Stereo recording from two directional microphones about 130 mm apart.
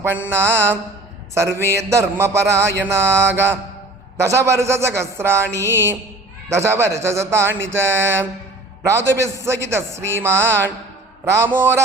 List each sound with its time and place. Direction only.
0.0 s mantra: 15° right (ahead or behind)
1.3 s a man's voice: 20° right (ahead or behind)